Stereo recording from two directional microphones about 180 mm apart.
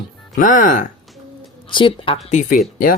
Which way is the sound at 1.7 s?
25° left (ahead or behind).